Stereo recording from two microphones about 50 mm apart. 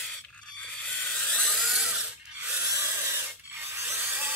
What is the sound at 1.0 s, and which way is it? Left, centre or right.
Helicopter, left.